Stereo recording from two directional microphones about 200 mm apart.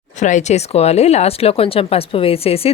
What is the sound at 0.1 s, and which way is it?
Speech, 35° left (ahead or behind).